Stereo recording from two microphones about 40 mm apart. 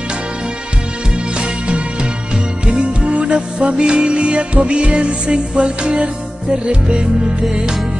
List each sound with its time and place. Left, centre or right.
2.6 s music: right